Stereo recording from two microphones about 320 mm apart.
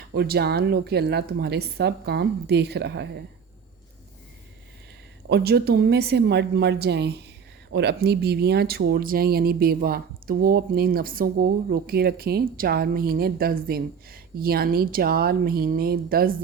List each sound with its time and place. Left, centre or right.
0.1 s speech: right
5.3 s speech: right